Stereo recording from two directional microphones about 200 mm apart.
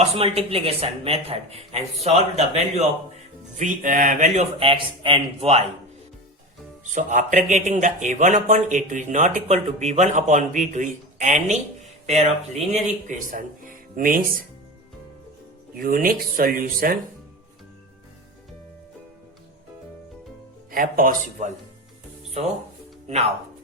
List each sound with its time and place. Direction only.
0.0 s speech: 30° right (ahead or behind)
4.6 s speech: 25° right (ahead or behind)
6.9 s speech: 40° right (ahead or behind)
15.7 s speech: 45° right (ahead or behind)
20.7 s speech: 45° right (ahead or behind)